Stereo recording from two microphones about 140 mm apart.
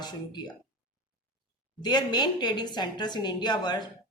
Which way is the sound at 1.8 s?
30° left (ahead or behind).